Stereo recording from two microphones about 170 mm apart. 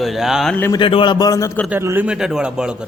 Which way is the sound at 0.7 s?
30° left (ahead or behind).